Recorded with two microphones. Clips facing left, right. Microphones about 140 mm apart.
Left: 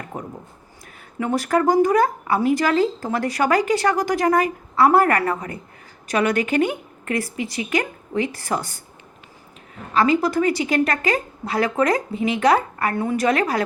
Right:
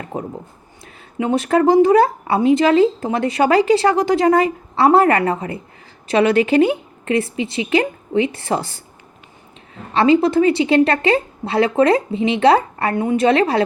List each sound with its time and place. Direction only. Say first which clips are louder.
0.1 s speech: right 6 dB; 30° right (ahead or behind)
9.9 s speech: right 5 dB; 25° right (ahead or behind)